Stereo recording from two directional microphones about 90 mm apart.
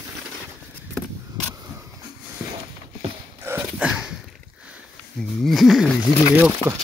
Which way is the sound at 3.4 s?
25° right (ahead or behind).